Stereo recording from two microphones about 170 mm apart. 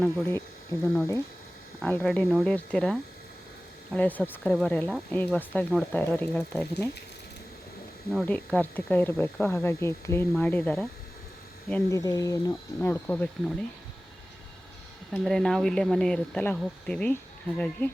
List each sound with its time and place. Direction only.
0.0 s speech: 15° left (ahead or behind)
1.8 s speech: 5° left (ahead or behind)
8.1 s speech: 5° left (ahead or behind)
15.1 s speech: centre (ahead or behind)